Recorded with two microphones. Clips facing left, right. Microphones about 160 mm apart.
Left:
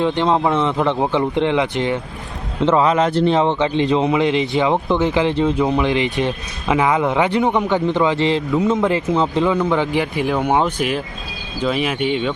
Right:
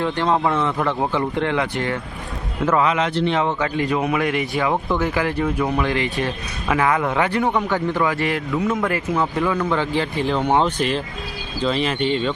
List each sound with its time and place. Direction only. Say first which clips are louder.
0.0 s a man's voice: left 3 dB; 20° left (ahead or behind)
2.9 s a man's voice: left 5 dB; 40° left (ahead or behind); by 12.3 s 5° left (ahead or behind)